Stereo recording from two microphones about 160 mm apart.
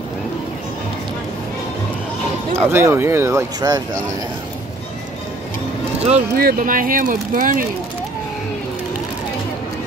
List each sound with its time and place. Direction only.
2.7 s speech: 15° right (ahead or behind)
5.9 s speech: 40° right (ahead or behind)
6.3 s speech: 65° right (ahead or behind)